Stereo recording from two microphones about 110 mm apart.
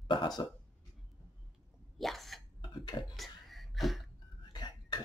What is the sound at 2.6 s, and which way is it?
Cough, 40° left (ahead or behind).